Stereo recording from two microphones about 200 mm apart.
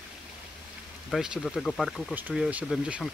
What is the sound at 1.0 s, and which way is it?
Speech, centre (ahead or behind).